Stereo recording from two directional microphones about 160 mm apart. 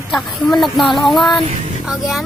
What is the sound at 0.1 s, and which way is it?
Speech, centre (ahead or behind).